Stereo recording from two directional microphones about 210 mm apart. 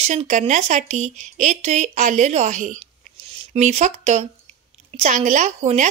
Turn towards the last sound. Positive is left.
turn(degrees=-35)  # may be behind; listen again after turning